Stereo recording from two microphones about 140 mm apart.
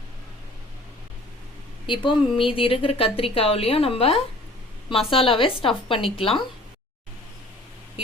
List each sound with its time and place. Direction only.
1.9 s a woman's voice: 35° left (ahead or behind)